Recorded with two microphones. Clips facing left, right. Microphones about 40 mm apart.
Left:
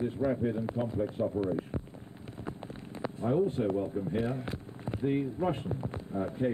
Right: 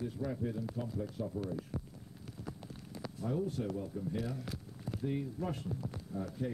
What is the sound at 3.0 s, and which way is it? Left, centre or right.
Speech, left.